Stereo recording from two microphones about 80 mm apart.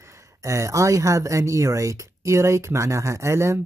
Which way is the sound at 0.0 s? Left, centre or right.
Right.